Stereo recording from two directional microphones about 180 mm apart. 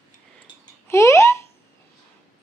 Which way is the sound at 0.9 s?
15° left (ahead or behind).